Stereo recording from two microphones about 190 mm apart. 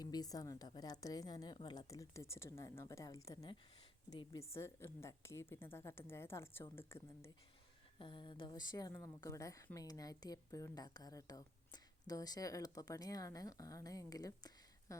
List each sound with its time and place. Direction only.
0.0 s a woman's voice: 20° left (ahead or behind)
7.9 s a woman's voice: 25° left (ahead or behind)